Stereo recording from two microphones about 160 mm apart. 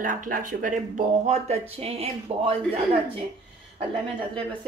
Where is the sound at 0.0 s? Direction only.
55° right (ahead or behind); by 3.0 s 35° right (ahead or behind).